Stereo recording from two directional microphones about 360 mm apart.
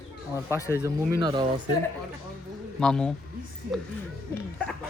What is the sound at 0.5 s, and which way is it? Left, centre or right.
Speech, centre.